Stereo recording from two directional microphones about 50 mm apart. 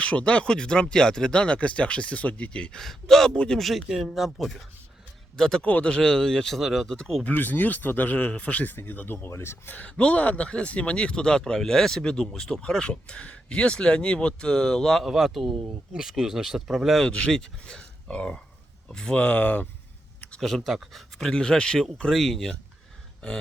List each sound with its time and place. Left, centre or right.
0.0 s speech: left
2.7 s speech: centre
3.3 s speech: centre
3.6 s speech: centre
6.8 s speech: centre
7.3 s speech: left
8.7 s speech: left
9.6 s speech: left; by 15.0 s centre
15.0 s speech: centre
17.0 s speech: centre
18.1 s speech: left
20.4 s speech: centre
21.2 s speech: centre
23.2 s speech: centre